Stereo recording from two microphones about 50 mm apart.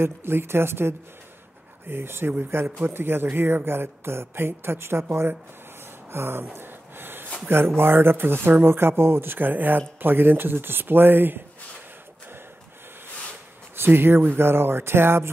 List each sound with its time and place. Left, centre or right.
0.0 s speech: right
6.1 s a sound: right
7.4 s speech: right
13.7 s speech: right